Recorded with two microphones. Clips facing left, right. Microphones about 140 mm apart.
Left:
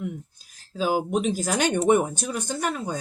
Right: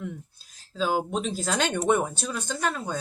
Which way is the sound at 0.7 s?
10° left (ahead or behind).